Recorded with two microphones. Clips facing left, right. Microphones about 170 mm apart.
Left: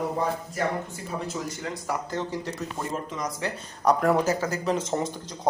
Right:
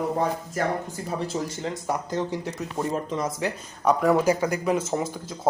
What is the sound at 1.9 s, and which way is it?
Speech, 20° right (ahead or behind).